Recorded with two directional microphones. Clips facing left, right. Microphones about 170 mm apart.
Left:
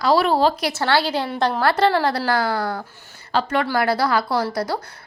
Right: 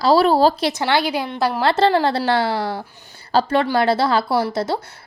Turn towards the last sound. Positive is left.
turn(degrees=-25)  # may be behind; listen again after turning